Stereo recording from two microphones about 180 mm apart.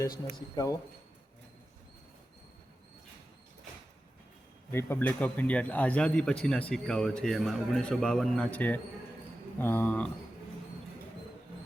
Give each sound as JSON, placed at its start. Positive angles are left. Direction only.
{"t": 0.5, "sound": "speech", "side_deg": 20}
{"t": 4.7, "sound": "a man's voice", "side_deg": 15}